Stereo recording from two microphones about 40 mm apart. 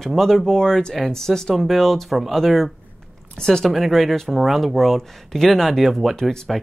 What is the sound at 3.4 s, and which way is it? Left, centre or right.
Speech, centre.